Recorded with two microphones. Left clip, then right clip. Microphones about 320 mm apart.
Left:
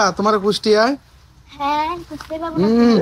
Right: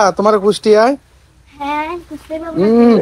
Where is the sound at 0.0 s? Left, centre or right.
Centre.